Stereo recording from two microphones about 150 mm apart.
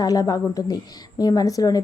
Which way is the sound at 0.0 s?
25° left (ahead or behind).